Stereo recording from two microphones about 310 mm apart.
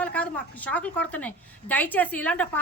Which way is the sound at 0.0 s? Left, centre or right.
Centre.